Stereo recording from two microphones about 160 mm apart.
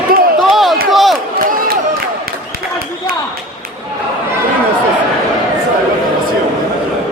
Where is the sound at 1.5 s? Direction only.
65° right (ahead or behind).